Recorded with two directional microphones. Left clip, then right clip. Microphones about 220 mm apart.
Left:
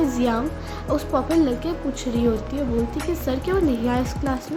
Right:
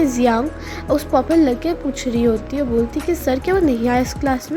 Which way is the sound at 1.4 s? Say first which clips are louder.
Right 5 dB; 30° right (ahead or behind).